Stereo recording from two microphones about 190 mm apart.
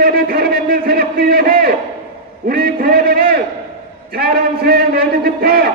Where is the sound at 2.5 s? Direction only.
50° right (ahead or behind).